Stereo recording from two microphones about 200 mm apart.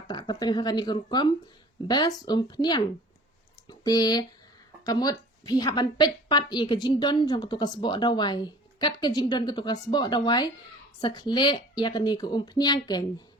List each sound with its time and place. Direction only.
0.1 s a woman's voice: 20° left (ahead or behind)